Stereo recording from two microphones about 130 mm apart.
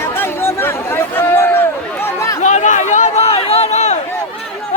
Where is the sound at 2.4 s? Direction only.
70° left (ahead or behind).